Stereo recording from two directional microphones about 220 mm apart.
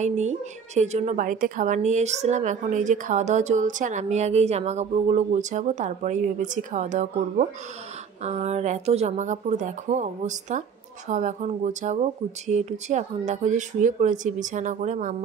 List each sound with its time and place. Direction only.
0.0 s a woman's voice: 30° right (ahead or behind)